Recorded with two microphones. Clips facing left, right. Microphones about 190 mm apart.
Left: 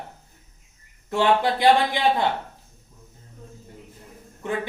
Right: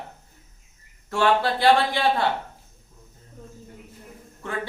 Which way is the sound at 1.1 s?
20° left (ahead or behind).